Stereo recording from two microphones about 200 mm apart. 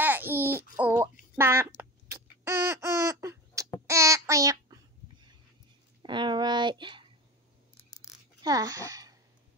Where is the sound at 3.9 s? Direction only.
15° right (ahead or behind).